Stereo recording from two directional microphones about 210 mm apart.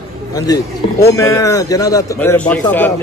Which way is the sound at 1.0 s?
15° left (ahead or behind).